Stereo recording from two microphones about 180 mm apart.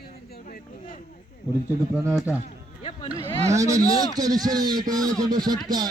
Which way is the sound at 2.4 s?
35° left (ahead or behind).